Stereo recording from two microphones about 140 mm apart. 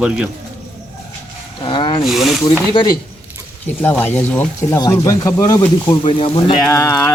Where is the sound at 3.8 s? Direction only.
15° left (ahead or behind).